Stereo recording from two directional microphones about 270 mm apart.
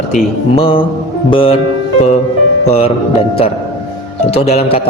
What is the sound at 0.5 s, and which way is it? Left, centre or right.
A man's voice, centre.